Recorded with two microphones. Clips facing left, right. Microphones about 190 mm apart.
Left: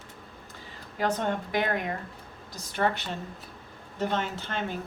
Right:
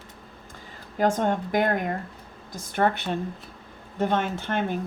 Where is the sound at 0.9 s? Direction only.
45° right (ahead or behind).